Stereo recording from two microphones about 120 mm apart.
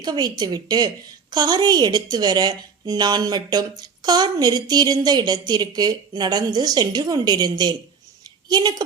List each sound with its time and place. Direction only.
0.0 s a woman's voice: 35° right (ahead or behind)